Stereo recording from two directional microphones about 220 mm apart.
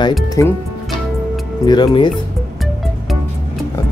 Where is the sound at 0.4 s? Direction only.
15° left (ahead or behind).